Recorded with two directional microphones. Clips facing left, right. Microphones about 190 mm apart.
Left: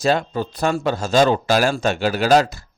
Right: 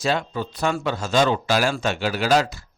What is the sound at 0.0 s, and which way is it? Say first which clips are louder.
A man's voice: left 4 dB; 40° left (ahead or behind).